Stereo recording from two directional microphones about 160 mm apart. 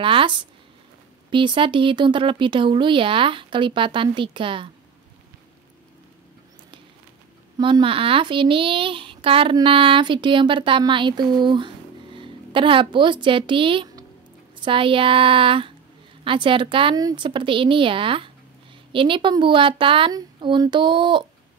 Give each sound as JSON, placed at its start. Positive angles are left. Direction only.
{"t": 0.0, "sound": "speech", "side_deg": -35}
{"t": 7.5, "sound": "speech", "side_deg": -30}